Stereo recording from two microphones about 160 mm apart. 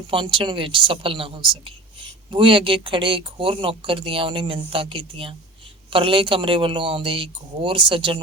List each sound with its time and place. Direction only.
0.1 s speech: 30° right (ahead or behind)